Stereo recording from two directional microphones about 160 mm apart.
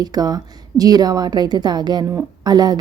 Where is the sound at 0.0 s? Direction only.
25° right (ahead or behind).